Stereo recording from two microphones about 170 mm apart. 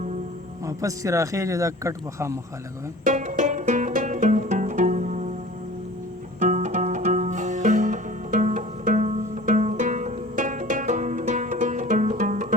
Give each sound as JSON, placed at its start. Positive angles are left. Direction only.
{"t": 0.6, "sound": "speech", "side_deg": -20}
{"t": 3.0, "sound": "music", "side_deg": -45}
{"t": 6.4, "sound": "music", "side_deg": -45}